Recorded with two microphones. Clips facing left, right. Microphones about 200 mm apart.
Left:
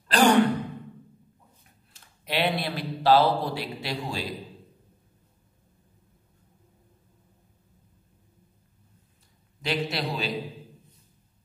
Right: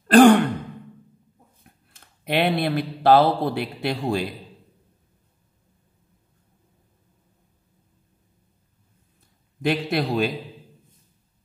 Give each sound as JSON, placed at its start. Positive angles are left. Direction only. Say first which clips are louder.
{"t": 0.1, "sound": "sigh", "louder": "right 8 dB", "side_deg": -55}
{"t": 1.6, "sound": "speech", "louder": "right 4 dB", "side_deg": -55}
{"t": 9.6, "sound": "a man's voice", "louder": "right 6 dB", "side_deg": -55}